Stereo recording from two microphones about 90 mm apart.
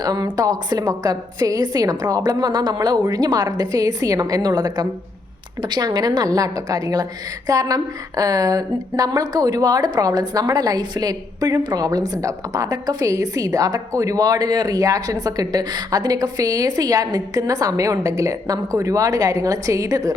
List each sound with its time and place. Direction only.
0.0 s a woman's voice: 45° right (ahead or behind)